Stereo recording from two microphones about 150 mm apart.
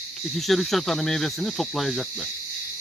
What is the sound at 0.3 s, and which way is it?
Speech, centre (ahead or behind).